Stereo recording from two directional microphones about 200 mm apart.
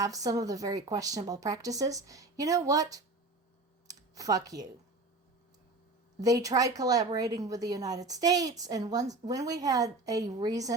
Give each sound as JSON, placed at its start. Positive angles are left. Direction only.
{"t": 0.0, "sound": "speech", "side_deg": -15}
{"t": 3.8, "sound": "a sound", "side_deg": -20}
{"t": 6.1, "sound": "speech", "side_deg": -15}